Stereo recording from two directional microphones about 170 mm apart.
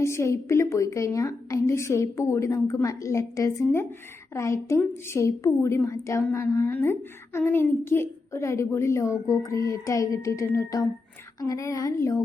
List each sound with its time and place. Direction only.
0.0 s a woman's voice: 15° left (ahead or behind)
9.3 s music: 20° left (ahead or behind)